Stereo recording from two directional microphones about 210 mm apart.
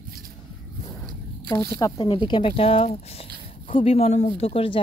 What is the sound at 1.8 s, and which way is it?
Speech, 25° left (ahead or behind).